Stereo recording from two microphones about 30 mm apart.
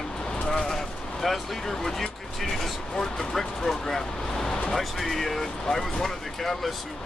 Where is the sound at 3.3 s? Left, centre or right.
Centre.